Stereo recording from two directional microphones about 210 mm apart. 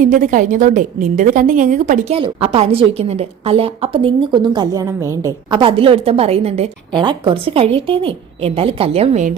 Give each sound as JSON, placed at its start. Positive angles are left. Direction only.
{"t": 0.0, "sound": "a woman's voice", "side_deg": -35}